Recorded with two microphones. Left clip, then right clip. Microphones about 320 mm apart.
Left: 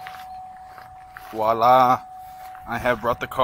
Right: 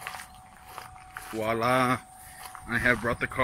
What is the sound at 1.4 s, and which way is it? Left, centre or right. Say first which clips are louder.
Speech: left 10 dB; centre.